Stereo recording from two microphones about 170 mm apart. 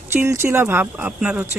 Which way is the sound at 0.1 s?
15° right (ahead or behind).